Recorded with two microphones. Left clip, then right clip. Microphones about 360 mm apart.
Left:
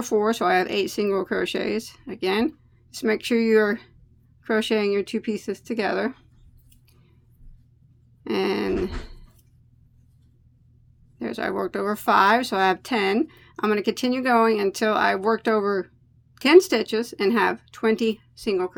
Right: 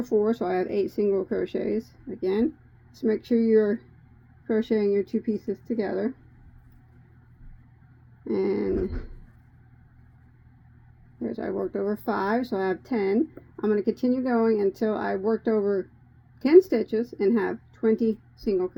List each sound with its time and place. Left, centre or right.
0.0 s speech: left
5.5 s speech: centre
5.7 s speech: left
8.2 s speech: left
11.2 s speech: left
18.5 s a woman's voice: centre